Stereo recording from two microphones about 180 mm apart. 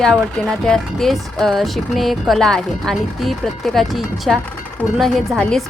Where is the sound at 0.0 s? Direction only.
Centre (ahead or behind).